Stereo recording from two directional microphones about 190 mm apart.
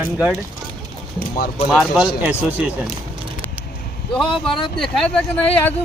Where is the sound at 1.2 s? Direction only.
50° left (ahead or behind).